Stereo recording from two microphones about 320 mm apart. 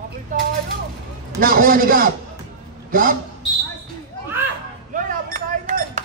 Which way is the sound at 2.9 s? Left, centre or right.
Right.